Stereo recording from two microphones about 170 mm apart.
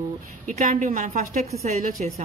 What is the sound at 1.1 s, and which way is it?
A woman's voice, 40° right (ahead or behind).